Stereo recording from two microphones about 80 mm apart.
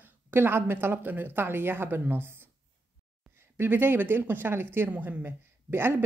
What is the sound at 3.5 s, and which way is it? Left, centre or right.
A woman's voice, right.